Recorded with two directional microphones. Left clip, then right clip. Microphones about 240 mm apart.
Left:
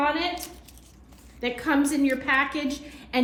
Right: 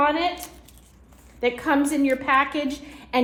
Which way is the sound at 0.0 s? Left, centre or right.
Right.